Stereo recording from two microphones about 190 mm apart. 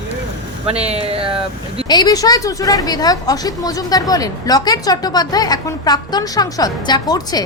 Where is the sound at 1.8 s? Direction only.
20° left (ahead or behind).